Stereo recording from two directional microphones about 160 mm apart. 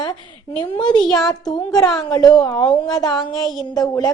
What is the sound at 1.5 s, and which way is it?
A woman's voice, 25° left (ahead or behind).